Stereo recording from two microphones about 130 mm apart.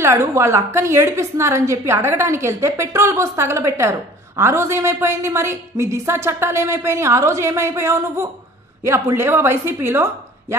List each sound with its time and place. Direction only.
0.0 s a woman's voice: 20° right (ahead or behind)